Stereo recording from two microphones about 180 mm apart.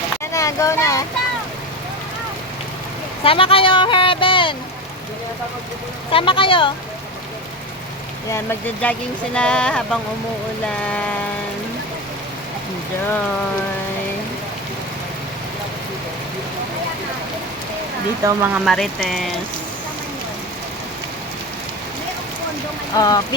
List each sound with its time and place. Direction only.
0.3 s speech: 20° left (ahead or behind)
3.2 s speech: 30° left (ahead or behind)
6.1 s speech: 30° left (ahead or behind)
8.3 s speech: 10° left (ahead or behind)
18.3 s speech: 10° right (ahead or behind)
18.6 s speech: centre (ahead or behind)
23.0 s speech: 20° left (ahead or behind)